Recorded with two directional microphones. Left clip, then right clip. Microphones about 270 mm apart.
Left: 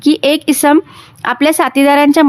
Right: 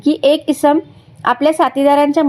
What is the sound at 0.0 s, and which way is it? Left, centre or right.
A woman's voice, left.